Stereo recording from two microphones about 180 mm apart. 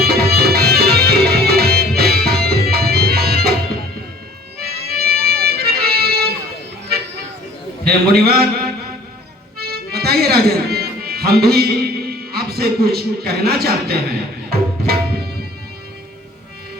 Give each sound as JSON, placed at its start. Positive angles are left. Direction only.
{"t": 0.0, "sound": "music", "side_deg": -60}
{"t": 4.7, "sound": "music", "side_deg": -60}
{"t": 6.8, "sound": "vehicle", "side_deg": -70}
{"t": 7.9, "sound": "a man's voice", "side_deg": -60}
{"t": 9.6, "sound": "accordion", "side_deg": -60}